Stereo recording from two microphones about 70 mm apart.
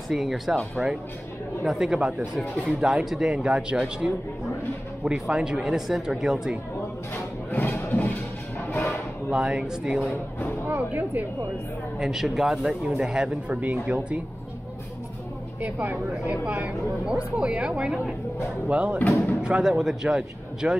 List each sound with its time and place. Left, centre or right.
0.1 s speech: centre
7.5 s a sound: left
8.6 s whip: left
9.3 s speech: centre
10.7 s speech: right
12.0 s speech: centre
15.6 s speech: right